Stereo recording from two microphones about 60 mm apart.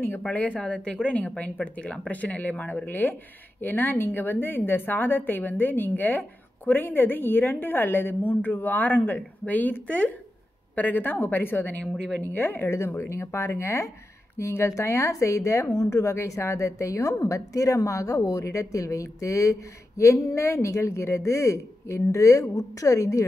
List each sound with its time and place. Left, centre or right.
0.2 s a woman's voice: left
11.8 s speech: centre
12.2 s a woman's voice: left
20.0 s a woman's voice: left